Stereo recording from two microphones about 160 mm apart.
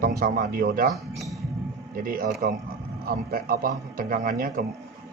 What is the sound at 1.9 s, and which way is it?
A man's voice, 60° right (ahead or behind).